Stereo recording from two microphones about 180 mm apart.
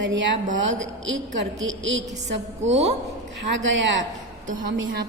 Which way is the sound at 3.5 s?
90° right.